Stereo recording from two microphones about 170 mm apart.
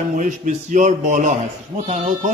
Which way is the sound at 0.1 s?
50° right (ahead or behind).